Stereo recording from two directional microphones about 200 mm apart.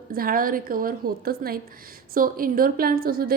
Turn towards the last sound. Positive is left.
turn(degrees=-50)  # may be behind; listen again after turning